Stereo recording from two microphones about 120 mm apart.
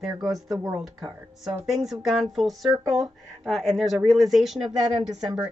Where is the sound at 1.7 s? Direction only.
Centre (ahead or behind).